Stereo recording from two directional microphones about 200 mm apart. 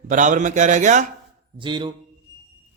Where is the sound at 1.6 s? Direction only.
25° right (ahead or behind).